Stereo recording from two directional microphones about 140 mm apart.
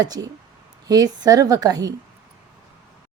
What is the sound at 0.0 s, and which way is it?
A woman's voice, 30° right (ahead or behind).